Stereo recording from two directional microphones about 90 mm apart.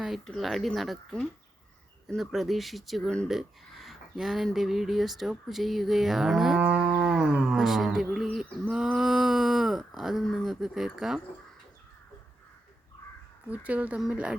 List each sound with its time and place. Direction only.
0.3 s speech: centre (ahead or behind)
6.6 s livestock: 15° right (ahead or behind)
8.7 s a sound: 5° right (ahead or behind)
10.3 s speech: centre (ahead or behind)
13.5 s speech: 15° right (ahead or behind)